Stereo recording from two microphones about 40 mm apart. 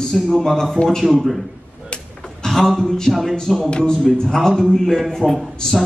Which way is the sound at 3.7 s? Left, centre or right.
Centre.